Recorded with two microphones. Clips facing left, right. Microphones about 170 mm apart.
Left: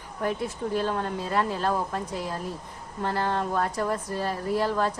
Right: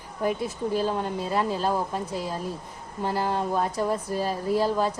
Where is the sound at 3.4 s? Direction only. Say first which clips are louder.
Right 1 dB; 20° right (ahead or behind).